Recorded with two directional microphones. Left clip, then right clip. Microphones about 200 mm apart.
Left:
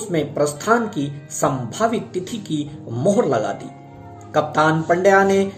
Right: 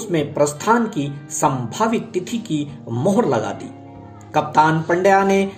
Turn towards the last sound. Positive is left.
turn(degrees=-25)  # may be behind; listen again after turning